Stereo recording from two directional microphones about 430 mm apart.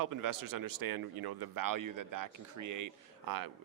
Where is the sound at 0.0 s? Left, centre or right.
Right.